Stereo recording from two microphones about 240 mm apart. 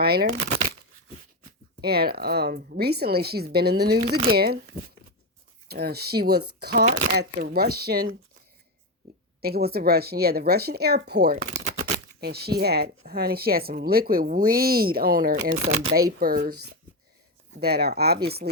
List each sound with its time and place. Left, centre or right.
0.0 s speech: right
1.5 s speech: right
5.6 s speech: right
9.0 s a sound: right
9.4 s speech: right
15.5 s speech: right
16.2 s speech: right